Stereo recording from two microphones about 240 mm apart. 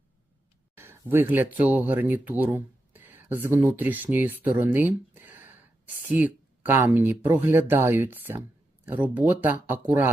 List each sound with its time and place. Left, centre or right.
0.8 s speech: centre